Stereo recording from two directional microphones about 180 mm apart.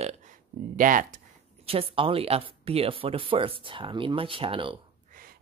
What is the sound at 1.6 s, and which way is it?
Speech, 30° right (ahead or behind).